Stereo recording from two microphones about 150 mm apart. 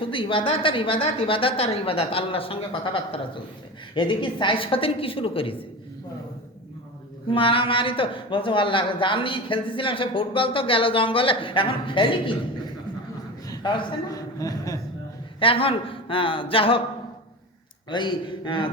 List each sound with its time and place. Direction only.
0.0 s a woman's voice: 35° left (ahead or behind)
7.3 s a woman's voice: 35° left (ahead or behind)
13.5 s a man's voice: 30° left (ahead or behind)
15.4 s a woman's voice: 35° left (ahead or behind)
17.8 s a woman's voice: 30° left (ahead or behind)